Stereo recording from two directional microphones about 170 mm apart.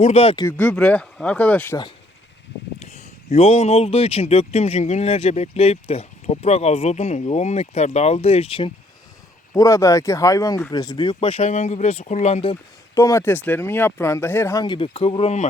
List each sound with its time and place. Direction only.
0.0 s a man's voice: 35° left (ahead or behind)
0.4 s speech: 5° left (ahead or behind)
2.7 s a man's voice: 40° left (ahead or behind)
9.5 s speech: 15° left (ahead or behind); by 12.5 s 35° left (ahead or behind)
12.9 s speech: 15° left (ahead or behind)
14.6 s a man's voice: 30° left (ahead or behind)